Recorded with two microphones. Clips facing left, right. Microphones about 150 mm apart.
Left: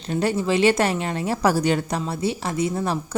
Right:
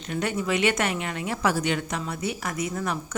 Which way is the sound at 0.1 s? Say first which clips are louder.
Left 5 dB; 30° left (ahead or behind).